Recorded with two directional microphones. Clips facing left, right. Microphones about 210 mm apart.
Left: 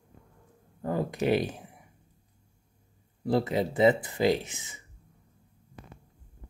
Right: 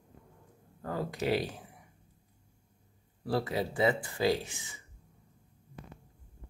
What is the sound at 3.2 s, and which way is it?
Speech, 20° left (ahead or behind).